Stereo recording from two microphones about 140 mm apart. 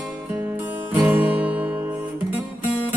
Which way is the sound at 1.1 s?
10° right (ahead or behind).